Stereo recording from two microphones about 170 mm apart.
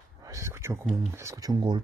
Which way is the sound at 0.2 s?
20° right (ahead or behind).